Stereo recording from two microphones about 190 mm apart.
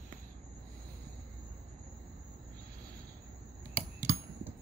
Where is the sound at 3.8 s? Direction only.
10° right (ahead or behind).